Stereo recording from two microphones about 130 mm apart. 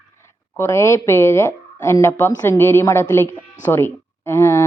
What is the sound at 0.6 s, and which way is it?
Speech, 20° left (ahead or behind).